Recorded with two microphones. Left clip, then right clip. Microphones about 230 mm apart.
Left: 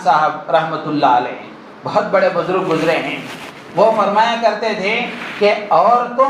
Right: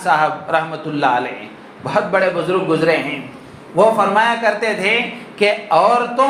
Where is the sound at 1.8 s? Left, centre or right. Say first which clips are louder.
Left 1 dB; right.